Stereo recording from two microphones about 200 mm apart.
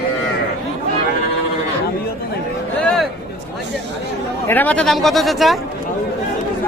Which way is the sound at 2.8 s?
5° left (ahead or behind).